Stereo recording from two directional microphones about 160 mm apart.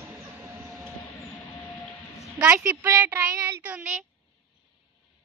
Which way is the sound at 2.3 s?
10° right (ahead or behind).